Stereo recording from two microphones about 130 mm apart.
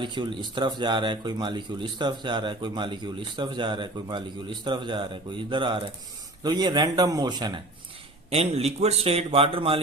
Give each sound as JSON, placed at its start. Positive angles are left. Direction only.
{"t": 0.0, "sound": "speech", "side_deg": -35}
{"t": 8.3, "sound": "speech", "side_deg": -50}